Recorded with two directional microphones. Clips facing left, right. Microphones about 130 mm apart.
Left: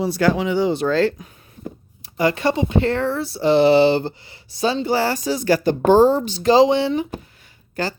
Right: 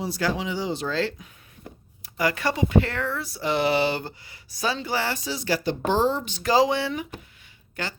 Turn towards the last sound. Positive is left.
turn(degrees=40)  # may be behind; listen again after turning